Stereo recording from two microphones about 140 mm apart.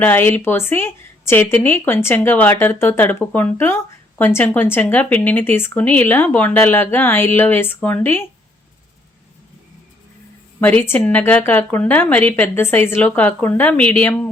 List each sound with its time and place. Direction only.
0.0 s a woman's voice: 15° left (ahead or behind)
10.6 s a woman's voice: 15° left (ahead or behind)